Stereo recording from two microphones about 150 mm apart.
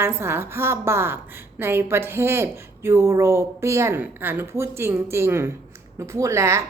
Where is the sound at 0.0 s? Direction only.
15° right (ahead or behind).